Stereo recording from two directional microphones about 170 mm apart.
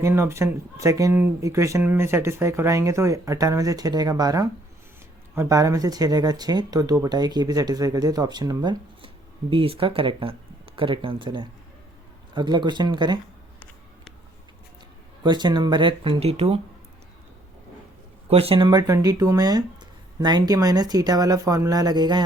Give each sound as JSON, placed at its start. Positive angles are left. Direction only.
{"t": 0.0, "sound": "speech", "side_deg": -15}
{"t": 15.2, "sound": "speech", "side_deg": -25}
{"t": 18.3, "sound": "speech", "side_deg": -35}